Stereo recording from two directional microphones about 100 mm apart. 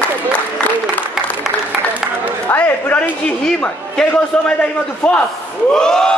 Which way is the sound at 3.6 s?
10° left (ahead or behind).